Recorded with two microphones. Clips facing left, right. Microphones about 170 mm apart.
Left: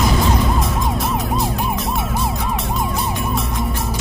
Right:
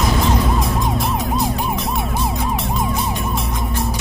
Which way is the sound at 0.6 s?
Centre (ahead or behind).